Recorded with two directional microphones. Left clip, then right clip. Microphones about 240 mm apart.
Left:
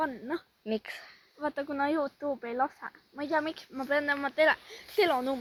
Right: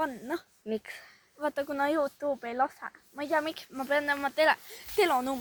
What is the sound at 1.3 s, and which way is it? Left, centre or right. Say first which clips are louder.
Speech: right 2 dB; right.